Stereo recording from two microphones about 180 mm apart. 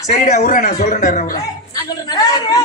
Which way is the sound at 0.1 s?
40° left (ahead or behind).